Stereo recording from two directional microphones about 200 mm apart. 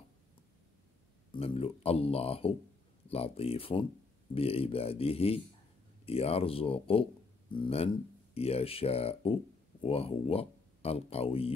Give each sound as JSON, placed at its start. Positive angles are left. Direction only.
{"t": 1.3, "sound": "speech", "side_deg": 25}